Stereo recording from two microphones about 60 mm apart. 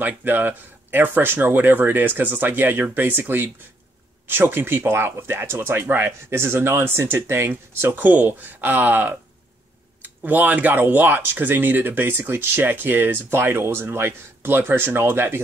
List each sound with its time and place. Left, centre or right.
0.0 s speech: right
8.0 s speech: right